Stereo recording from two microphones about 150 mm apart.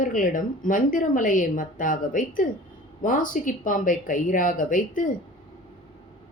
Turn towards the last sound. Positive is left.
turn(degrees=60)  # may be behind; listen again after turning